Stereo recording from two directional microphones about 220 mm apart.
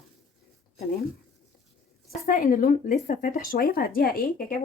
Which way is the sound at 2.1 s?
40° left (ahead or behind).